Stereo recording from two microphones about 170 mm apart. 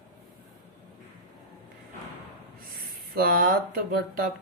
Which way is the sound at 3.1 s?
60° right (ahead or behind).